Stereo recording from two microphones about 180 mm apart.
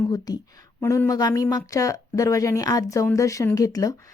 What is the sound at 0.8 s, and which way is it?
Speech, 15° left (ahead or behind).